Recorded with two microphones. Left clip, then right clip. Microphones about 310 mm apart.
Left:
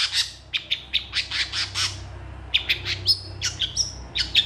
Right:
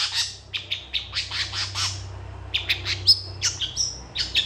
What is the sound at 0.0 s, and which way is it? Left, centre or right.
Bird, centre.